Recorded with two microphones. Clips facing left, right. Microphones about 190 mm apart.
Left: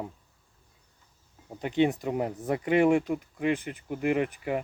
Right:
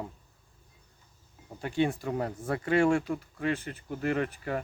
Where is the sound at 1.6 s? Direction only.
20° left (ahead or behind).